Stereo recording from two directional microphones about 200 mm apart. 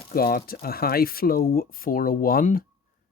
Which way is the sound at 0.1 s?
50° left (ahead or behind).